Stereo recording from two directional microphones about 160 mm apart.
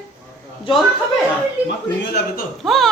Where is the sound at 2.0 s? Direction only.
90° left.